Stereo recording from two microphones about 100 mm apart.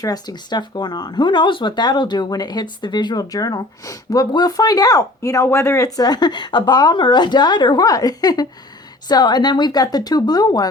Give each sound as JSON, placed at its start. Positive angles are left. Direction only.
{"t": 0.0, "sound": "speech", "side_deg": 40}